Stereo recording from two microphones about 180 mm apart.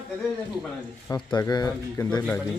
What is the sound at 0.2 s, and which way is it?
Speech, 5° left (ahead or behind).